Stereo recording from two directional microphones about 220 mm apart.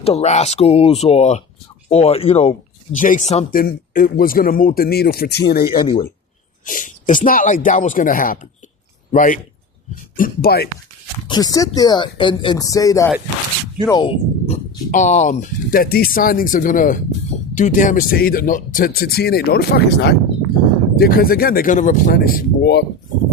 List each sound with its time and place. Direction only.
0.0 s speech: 30° left (ahead or behind); by 5.8 s 45° left (ahead or behind)
5.8 s speech: 20° left (ahead or behind)
6.7 s speech: 35° left (ahead or behind)
11.3 s speech: 15° left (ahead or behind); by 22.8 s 45° left (ahead or behind)